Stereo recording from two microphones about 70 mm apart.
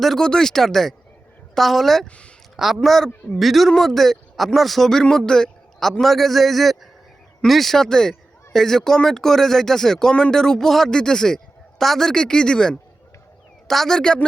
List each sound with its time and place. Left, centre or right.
0.0 s speech: centre
2.0 s speech: centre
2.8 s speech: centre